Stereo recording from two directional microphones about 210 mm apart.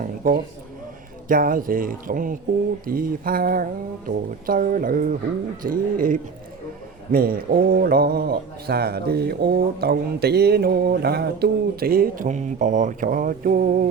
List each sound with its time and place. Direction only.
1.3 s speech: 40° right (ahead or behind)